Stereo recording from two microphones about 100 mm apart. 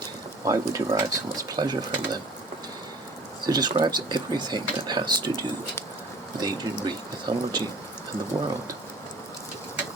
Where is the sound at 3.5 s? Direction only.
45° right (ahead or behind).